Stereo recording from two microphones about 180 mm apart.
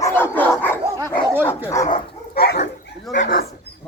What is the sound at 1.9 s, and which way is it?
Dog, 60° left (ahead or behind).